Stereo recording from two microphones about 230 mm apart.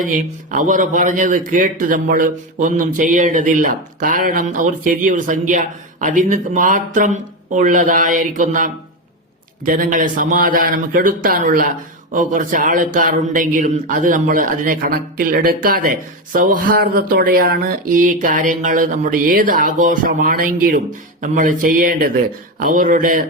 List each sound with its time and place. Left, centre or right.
0.5 s a man's voice: right